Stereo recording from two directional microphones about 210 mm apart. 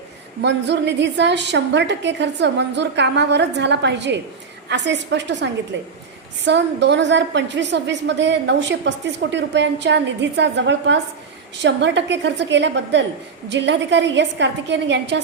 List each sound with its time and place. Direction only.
0.4 s a woman's voice: 55° right (ahead or behind)